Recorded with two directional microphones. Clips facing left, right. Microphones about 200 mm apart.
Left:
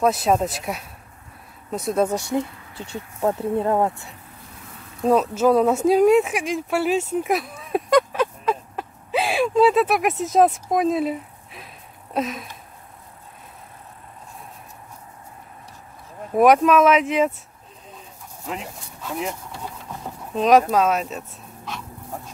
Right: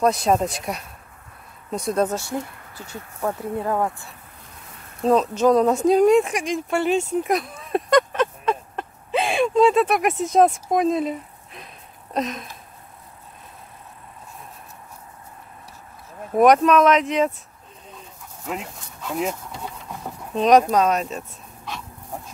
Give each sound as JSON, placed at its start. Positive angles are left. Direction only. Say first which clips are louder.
{"t": 0.0, "sound": "speech", "louder": "even", "side_deg": 0}
{"t": 2.1, "sound": "speech", "louder": "left 4 dB", "side_deg": 20}
{"t": 5.0, "sound": "speech", "louder": "even", "side_deg": 5}
{"t": 16.3, "sound": "speech", "louder": "even", "side_deg": 5}
{"t": 20.3, "sound": "speech", "louder": "even", "side_deg": 0}